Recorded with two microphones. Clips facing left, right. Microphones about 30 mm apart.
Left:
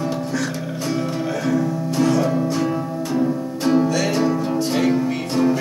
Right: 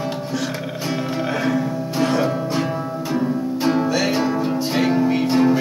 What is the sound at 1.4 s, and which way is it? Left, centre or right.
Music, right.